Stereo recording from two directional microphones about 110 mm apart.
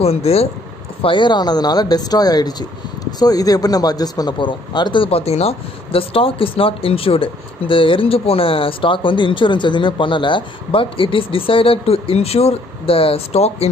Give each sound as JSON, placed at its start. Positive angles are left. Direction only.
{"t": 0.0, "sound": "speech", "side_deg": 70}
{"t": 1.0, "sound": "speech", "side_deg": 45}